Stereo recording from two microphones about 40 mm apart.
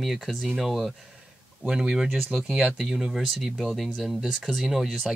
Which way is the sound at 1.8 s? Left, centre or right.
Centre.